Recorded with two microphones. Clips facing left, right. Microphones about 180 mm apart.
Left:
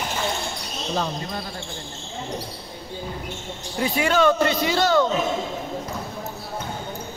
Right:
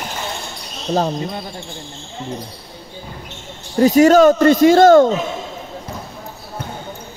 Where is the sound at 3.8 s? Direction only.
40° right (ahead or behind).